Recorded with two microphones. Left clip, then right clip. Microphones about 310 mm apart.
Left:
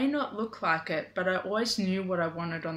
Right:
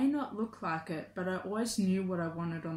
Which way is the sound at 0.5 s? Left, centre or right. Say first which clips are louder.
Left 12 dB; centre.